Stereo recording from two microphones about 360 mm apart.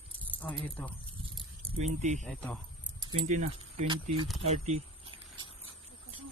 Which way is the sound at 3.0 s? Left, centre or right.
Centre.